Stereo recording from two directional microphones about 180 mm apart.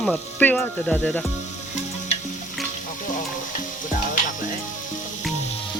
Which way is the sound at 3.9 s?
45° left (ahead or behind).